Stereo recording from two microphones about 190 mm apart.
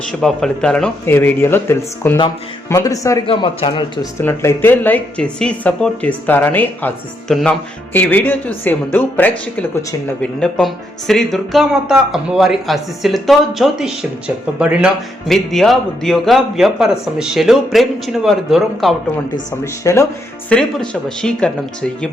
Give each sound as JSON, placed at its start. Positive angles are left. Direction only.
{"t": 0.0, "sound": "a woman's voice", "side_deg": 5}
{"t": 3.2, "sound": "speech", "side_deg": 25}
{"t": 4.2, "sound": "a woman's voice", "side_deg": 10}
{"t": 19.5, "sound": "a woman's voice", "side_deg": 15}
{"t": 20.5, "sound": "speech", "side_deg": 5}